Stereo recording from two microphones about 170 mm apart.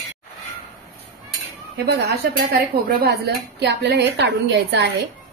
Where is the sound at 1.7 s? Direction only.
80° right.